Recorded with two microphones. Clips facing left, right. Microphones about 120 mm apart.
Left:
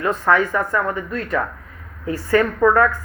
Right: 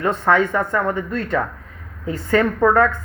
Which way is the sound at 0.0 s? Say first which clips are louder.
Right 1 dB; 25° right (ahead or behind).